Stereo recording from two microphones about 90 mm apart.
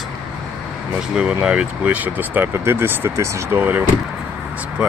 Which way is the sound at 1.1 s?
15° right (ahead or behind).